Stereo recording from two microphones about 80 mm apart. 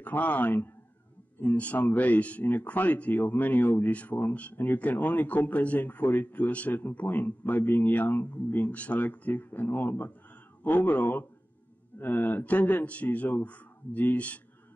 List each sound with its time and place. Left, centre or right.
0.0 s speech: centre